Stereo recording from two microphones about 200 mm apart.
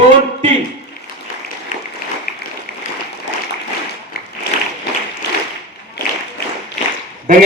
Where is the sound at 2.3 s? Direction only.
50° left (ahead or behind).